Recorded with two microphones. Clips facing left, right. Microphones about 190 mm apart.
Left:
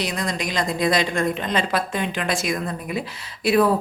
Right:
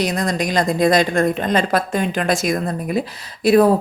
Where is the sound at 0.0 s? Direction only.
45° right (ahead or behind).